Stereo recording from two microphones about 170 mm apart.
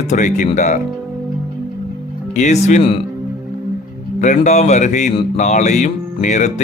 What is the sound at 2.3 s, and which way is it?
Music, 45° left (ahead or behind).